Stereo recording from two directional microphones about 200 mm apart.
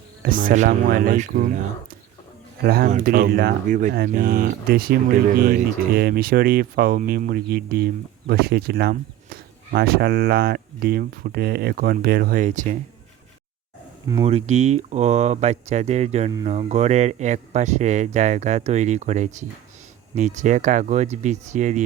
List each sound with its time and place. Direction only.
0.2 s speech: 45° right (ahead or behind)
2.6 s speech: 45° right (ahead or behind)
14.3 s speech: 30° right (ahead or behind)